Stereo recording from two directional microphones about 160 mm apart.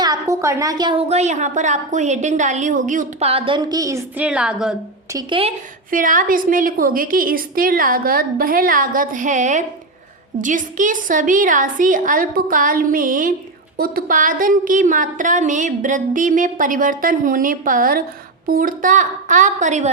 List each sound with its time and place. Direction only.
0.0 s a woman's voice: 20° right (ahead or behind)
4.2 s a woman's voice: 5° right (ahead or behind)
5.1 s a woman's voice: 35° right (ahead or behind)
5.9 s a woman's voice: 55° right (ahead or behind)